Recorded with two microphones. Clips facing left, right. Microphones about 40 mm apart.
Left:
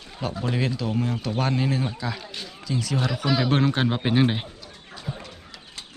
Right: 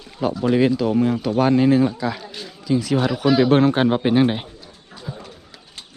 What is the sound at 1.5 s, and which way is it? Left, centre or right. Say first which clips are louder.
Speech: right 10 dB; right.